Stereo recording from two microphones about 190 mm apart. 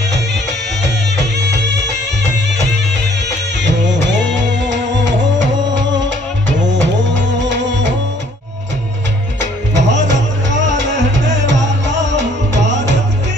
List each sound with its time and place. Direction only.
0.1 s music: 65° right (ahead or behind)
3.6 s music: 70° right (ahead or behind)
9.4 s music: 65° right (ahead or behind)